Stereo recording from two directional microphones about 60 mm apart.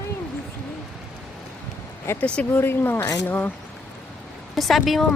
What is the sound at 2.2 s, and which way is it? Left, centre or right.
Speech, centre.